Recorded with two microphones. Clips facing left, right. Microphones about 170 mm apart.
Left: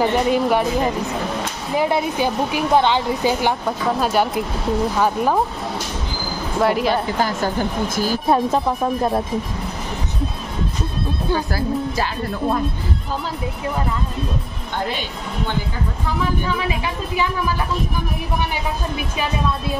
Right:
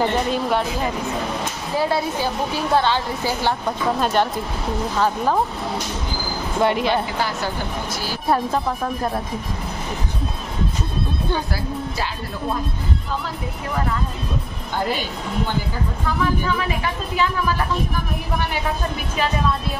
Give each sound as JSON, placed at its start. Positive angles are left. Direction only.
{"t": 0.0, "sound": "a woman's voice", "side_deg": 10}
{"t": 1.8, "sound": "a woman's voice", "side_deg": 20}
{"t": 3.6, "sound": "a woman's voice", "side_deg": 5}
{"t": 6.6, "sound": "speech", "side_deg": 0}
{"t": 7.2, "sound": "speech", "side_deg": 45}
{"t": 16.6, "sound": "a woman's voice", "side_deg": 20}